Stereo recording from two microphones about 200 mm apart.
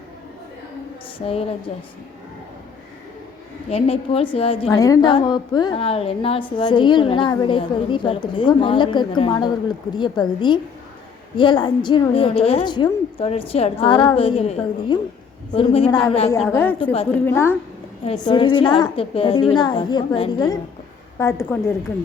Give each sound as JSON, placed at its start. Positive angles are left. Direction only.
{"t": 1.2, "sound": "a woman's voice", "side_deg": 30}
{"t": 3.7, "sound": "a woman's voice", "side_deg": 30}
{"t": 4.7, "sound": "a woman's voice", "side_deg": 15}
{"t": 18.0, "sound": "a woman's voice", "side_deg": 25}